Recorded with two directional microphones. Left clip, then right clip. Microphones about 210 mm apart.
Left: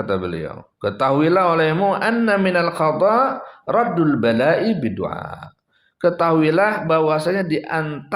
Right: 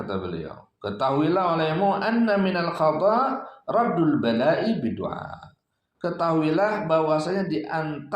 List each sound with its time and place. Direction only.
0.0 s speech: 40° left (ahead or behind)